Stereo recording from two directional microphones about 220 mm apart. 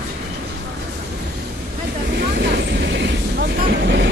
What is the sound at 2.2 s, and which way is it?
Vehicle, 50° right (ahead or behind).